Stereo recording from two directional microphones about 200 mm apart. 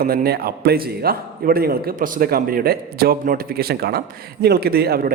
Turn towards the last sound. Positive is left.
turn(degrees=-50)  # may be behind; listen again after turning